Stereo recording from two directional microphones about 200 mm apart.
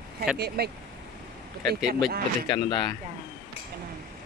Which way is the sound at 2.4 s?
25° left (ahead or behind).